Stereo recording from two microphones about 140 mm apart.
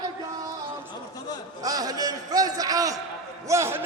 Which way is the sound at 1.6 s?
25° right (ahead or behind).